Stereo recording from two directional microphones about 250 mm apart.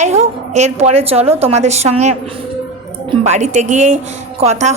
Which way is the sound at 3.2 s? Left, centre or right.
Right.